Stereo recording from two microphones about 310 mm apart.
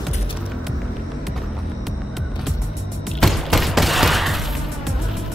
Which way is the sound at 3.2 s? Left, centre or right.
Centre.